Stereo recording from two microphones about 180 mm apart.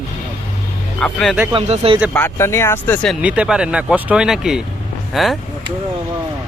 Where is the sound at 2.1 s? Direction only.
15° left (ahead or behind).